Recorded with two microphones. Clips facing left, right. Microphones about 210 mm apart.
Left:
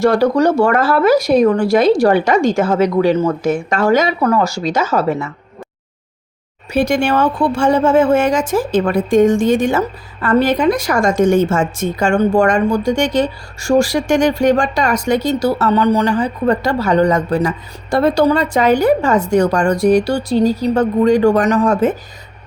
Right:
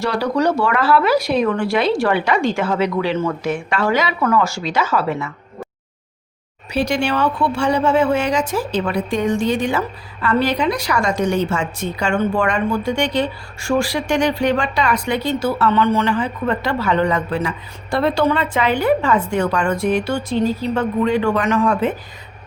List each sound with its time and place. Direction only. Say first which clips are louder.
0.0 s speech: left 6 dB; 45° left (ahead or behind)
6.7 s speech: left 4 dB; 50° left (ahead or behind)